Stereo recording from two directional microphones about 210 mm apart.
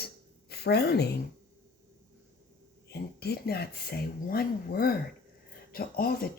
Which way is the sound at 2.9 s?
50° left (ahead or behind).